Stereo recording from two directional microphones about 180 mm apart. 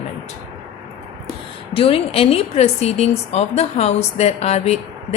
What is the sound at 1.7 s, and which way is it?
A woman's voice, 30° left (ahead or behind).